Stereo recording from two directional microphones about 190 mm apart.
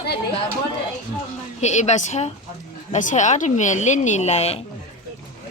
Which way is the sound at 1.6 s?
35° left (ahead or behind).